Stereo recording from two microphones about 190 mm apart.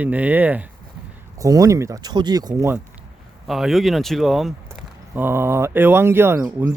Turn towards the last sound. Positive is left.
turn(degrees=-15)  # may be behind; listen again after turning